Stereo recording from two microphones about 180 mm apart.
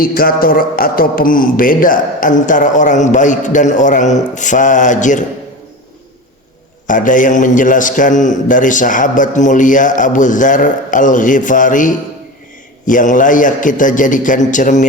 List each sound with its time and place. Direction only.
0.0 s a man's voice: 55° left (ahead or behind)
6.8 s a man's voice: 45° left (ahead or behind)